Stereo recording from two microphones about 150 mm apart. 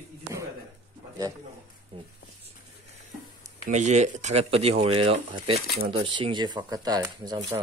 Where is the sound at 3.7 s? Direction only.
50° right (ahead or behind).